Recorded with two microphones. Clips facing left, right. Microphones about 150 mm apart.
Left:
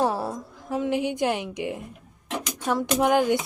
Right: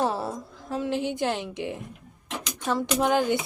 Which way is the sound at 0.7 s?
15° left (ahead or behind).